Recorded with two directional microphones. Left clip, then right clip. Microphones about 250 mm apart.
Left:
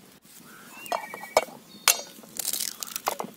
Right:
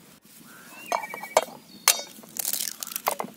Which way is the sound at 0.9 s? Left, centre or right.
Centre.